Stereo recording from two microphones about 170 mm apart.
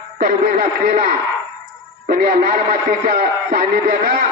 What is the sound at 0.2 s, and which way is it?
A man's voice, 60° right (ahead or behind).